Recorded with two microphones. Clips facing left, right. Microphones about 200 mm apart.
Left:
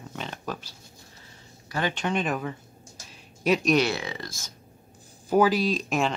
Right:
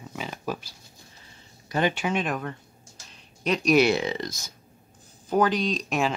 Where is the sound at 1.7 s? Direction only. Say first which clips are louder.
Right 4 dB; 20° right (ahead or behind).